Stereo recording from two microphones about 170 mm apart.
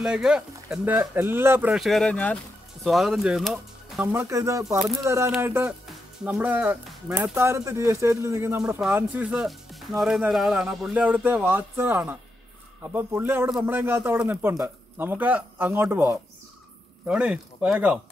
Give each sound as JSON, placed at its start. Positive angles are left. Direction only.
{"t": 0.0, "sound": "speech", "side_deg": -5}
{"t": 4.0, "sound": "speech", "side_deg": -15}
{"t": 5.9, "sound": "music", "side_deg": -5}
{"t": 7.3, "sound": "speech", "side_deg": -15}